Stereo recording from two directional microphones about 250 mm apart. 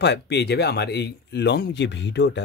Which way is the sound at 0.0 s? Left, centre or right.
Left.